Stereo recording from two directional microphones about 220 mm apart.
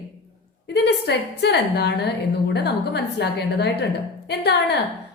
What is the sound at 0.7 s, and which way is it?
A woman's voice, 50° left (ahead or behind).